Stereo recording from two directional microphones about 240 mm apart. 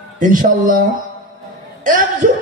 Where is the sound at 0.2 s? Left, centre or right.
Right.